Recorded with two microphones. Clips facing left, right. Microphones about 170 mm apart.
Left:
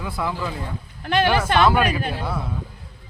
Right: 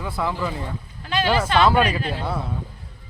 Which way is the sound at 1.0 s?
55° left (ahead or behind).